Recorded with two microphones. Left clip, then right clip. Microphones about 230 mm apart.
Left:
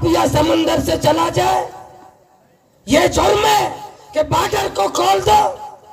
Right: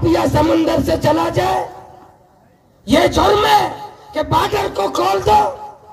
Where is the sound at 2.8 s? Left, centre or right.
Left.